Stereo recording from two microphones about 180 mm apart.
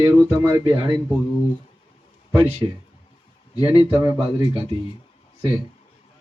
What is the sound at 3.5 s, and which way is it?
Speech, 20° left (ahead or behind).